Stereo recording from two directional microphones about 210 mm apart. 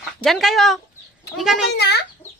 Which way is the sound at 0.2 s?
Centre (ahead or behind).